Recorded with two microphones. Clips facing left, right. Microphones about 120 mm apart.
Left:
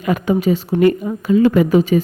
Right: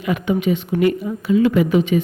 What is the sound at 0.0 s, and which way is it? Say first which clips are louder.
A woman's voice: left 3 dB; 40° left (ahead or behind).